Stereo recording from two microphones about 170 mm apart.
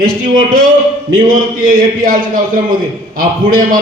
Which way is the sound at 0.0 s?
55° right (ahead or behind).